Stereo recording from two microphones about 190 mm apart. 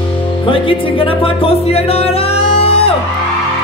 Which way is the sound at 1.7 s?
30° left (ahead or behind).